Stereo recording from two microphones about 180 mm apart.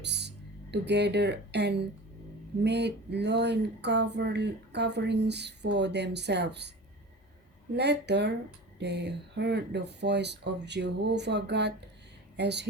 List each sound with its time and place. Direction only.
0.0 s speech: 70° right (ahead or behind)
7.8 s speech: 70° right (ahead or behind)